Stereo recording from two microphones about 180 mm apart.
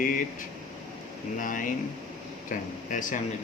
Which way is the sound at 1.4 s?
45° left (ahead or behind).